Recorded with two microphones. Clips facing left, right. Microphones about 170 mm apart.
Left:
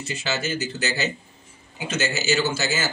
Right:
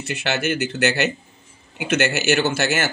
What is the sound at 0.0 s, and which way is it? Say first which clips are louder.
Speech: right 4 dB; 65° right (ahead or behind).